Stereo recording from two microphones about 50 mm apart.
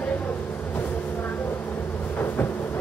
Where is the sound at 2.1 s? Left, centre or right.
Left.